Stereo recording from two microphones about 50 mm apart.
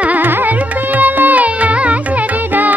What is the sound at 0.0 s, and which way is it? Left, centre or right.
Carnatic music, right.